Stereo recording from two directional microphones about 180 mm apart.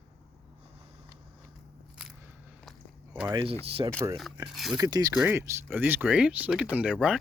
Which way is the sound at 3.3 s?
30° right (ahead or behind).